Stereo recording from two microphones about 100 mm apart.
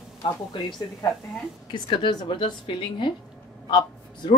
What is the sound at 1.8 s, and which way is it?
A woman's voice, 55° left (ahead or behind).